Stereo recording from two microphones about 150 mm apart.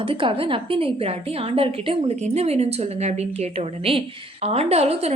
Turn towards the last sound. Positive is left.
turn(degrees=-45)  # may be behind; listen again after turning